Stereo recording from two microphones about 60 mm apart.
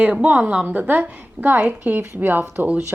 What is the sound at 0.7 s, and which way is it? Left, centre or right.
A woman's voice, right.